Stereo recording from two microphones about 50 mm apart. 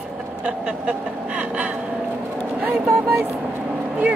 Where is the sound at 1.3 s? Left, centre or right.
Right.